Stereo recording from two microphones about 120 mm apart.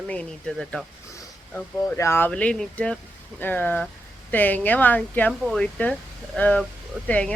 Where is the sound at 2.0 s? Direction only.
20° left (ahead or behind).